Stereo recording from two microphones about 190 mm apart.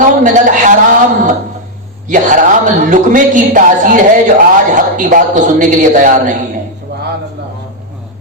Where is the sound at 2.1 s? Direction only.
45° right (ahead or behind).